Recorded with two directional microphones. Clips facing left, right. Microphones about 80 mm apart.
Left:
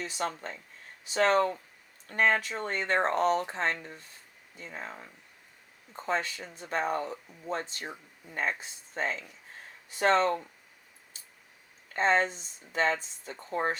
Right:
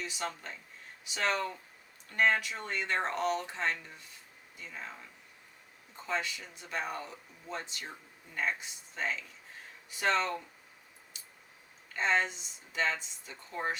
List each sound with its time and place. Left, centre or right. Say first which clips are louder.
0.0 s speech: left 4 dB; left
11.9 s speech: left 4 dB; left